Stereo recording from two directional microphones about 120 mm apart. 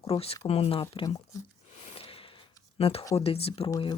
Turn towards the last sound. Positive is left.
turn(degrees=55)  # may be behind; listen again after turning